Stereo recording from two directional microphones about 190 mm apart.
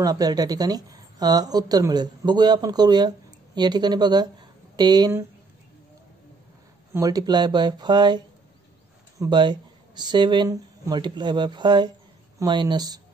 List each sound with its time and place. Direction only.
0.0 s a woman's voice: 20° right (ahead or behind)
6.9 s a woman's voice: 20° right (ahead or behind)
9.2 s a woman's voice: 25° right (ahead or behind)